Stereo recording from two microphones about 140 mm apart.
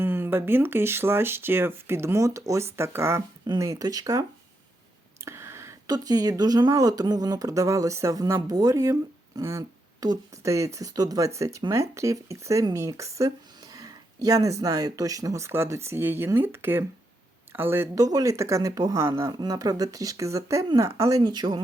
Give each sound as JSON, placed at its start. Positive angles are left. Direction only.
{"t": 0.0, "sound": "speech", "side_deg": -15}